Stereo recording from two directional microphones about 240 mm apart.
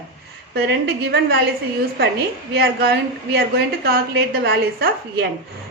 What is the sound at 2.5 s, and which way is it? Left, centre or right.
A woman's voice, right.